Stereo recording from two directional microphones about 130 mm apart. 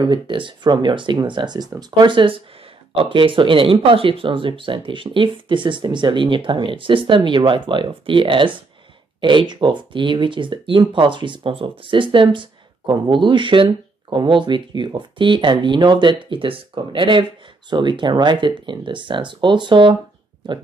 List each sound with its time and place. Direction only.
0.0 s speech: 40° right (ahead or behind)